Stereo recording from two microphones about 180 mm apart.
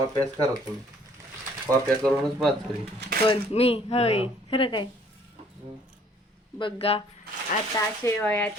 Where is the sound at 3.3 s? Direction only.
35° left (ahead or behind).